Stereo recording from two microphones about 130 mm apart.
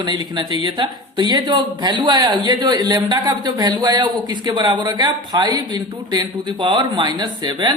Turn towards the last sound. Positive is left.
turn(degrees=-35)  # may be behind; listen again after turning